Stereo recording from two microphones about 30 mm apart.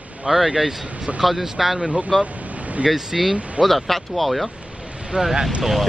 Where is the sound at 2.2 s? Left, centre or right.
Right.